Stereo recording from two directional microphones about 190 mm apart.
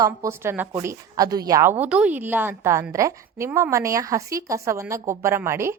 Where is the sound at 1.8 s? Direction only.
5° right (ahead or behind).